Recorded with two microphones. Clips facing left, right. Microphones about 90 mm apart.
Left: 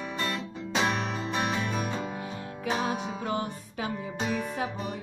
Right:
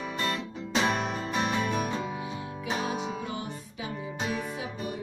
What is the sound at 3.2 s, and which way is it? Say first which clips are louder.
Music: left 4 dB; 55° left (ahead or behind).